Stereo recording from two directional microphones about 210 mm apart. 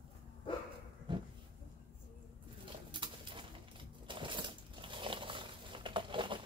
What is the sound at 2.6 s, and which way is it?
Pigeon, 25° right (ahead or behind).